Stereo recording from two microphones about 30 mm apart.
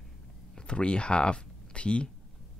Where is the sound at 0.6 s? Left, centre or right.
Left.